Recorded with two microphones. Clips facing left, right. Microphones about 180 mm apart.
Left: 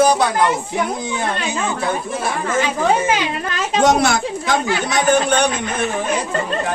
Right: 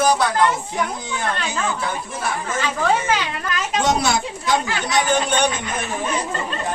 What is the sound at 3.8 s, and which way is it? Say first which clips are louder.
Speech: left 5 dB; 50° left (ahead or behind).